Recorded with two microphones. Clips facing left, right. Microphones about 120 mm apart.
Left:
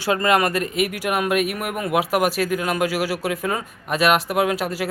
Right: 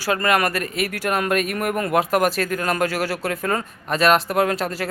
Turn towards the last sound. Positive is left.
turn(degrees=10)  # may be behind; listen again after turning